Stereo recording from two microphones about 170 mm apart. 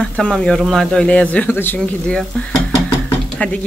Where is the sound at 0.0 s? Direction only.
5° left (ahead or behind).